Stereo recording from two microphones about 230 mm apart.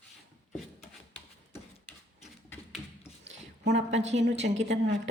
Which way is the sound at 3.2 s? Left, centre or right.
Right.